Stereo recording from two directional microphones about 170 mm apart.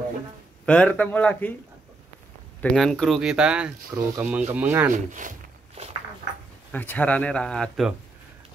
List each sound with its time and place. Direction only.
0.7 s speech: 5° left (ahead or behind)
2.6 s speech: centre (ahead or behind)
4.9 s speech: 50° right (ahead or behind)
6.7 s speech: 10° left (ahead or behind)